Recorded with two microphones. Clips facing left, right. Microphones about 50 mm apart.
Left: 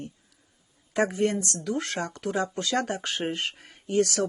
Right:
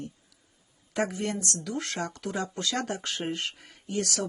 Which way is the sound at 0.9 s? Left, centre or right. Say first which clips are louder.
Left 5 dB; left.